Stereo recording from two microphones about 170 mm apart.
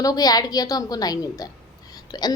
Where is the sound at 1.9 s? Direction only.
25° left (ahead or behind).